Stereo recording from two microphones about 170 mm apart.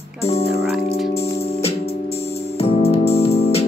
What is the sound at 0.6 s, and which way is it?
Music, centre (ahead or behind).